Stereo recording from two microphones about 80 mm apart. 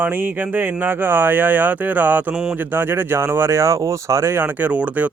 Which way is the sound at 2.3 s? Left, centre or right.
Centre.